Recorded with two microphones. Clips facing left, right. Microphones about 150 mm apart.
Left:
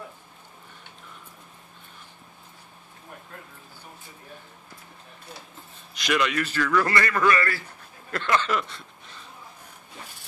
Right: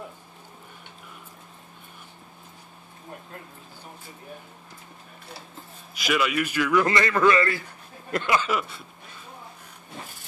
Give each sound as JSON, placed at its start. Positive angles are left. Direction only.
{"t": 5.9, "sound": "a man's voice", "side_deg": -5}
{"t": 8.1, "sound": "a man's voice", "side_deg": -10}